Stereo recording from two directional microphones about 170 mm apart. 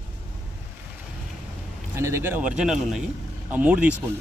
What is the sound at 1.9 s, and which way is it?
A man's voice, 15° right (ahead or behind).